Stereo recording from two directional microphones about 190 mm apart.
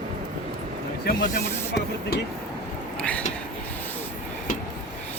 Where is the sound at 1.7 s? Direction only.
65° left (ahead or behind).